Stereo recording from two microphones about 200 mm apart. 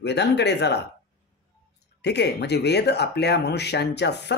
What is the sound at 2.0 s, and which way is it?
Speech, 55° left (ahead or behind).